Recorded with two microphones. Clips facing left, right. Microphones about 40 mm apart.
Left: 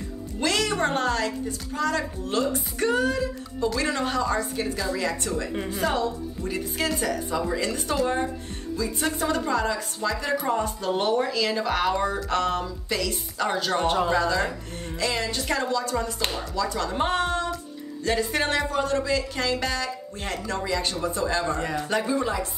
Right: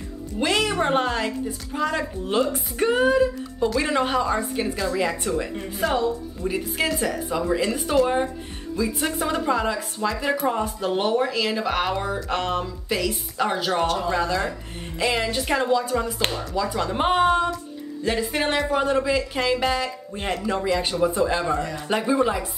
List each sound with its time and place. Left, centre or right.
0.4 s speech: centre
5.7 s speech: centre